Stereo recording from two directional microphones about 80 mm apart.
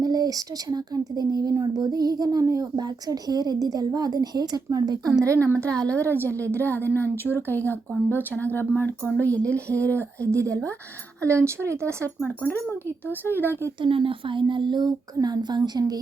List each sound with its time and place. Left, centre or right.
0.0 s a woman's voice: right
5.2 s speech: right
5.7 s speech: centre
6.2 s a woman's voice: left
11.2 s speech: right
13.1 s a woman's voice: left
13.8 s speech: right